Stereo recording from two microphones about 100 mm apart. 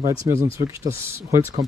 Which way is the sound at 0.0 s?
30° right (ahead or behind).